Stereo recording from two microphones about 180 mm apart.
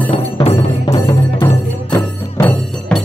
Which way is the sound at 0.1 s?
30° left (ahead or behind).